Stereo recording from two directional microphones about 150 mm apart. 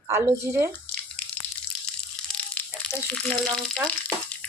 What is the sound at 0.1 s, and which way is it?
Speech, 15° right (ahead or behind).